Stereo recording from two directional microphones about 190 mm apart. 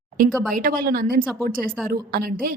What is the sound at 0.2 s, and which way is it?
A woman's voice, 45° right (ahead or behind).